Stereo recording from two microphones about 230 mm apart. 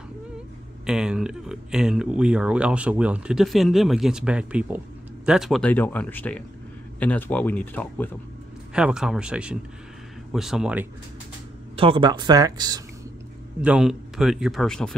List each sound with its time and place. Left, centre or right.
0.8 s speech: centre
8.7 s speech: centre
11.7 s speech: right
13.6 s speech: centre